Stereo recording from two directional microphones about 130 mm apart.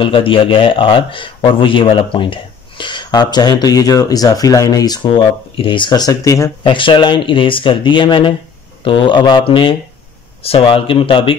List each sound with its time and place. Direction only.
0.0 s a man's voice: 45° left (ahead or behind); by 6.5 s 25° left (ahead or behind)
6.6 s a man's voice: 40° left (ahead or behind)